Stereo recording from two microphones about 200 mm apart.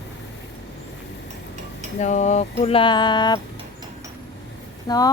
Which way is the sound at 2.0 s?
35° left (ahead or behind).